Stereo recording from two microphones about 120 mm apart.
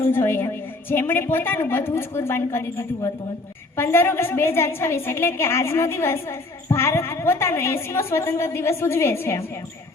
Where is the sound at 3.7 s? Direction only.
20° left (ahead or behind).